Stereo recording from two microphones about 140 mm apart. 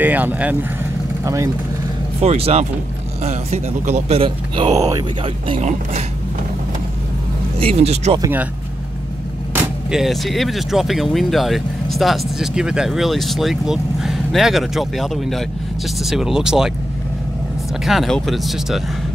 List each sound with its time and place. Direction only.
0.0 s speech: 10° right (ahead or behind)
1.2 s speech: 20° right (ahead or behind)
2.2 s a man's voice: 45° right (ahead or behind)
4.2 s speech: 35° right (ahead or behind)
4.7 s speech: 25° right (ahead or behind)
5.6 s a man's voice: 55° right (ahead or behind)
7.5 s a man's voice: 45° right (ahead or behind)
9.5 s speech: 10° right (ahead or behind)
17.8 s speech: centre (ahead or behind)